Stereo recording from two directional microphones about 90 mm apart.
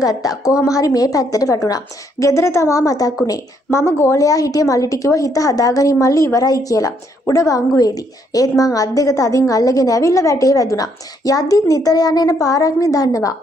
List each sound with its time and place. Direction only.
0.0 s a woman's voice: 40° left (ahead or behind)